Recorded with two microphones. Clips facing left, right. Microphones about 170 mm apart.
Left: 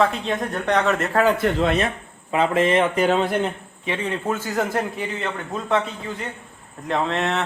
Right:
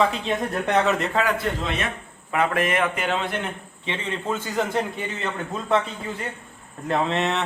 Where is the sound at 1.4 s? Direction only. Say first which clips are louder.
Left 5 dB; 60° left (ahead or behind).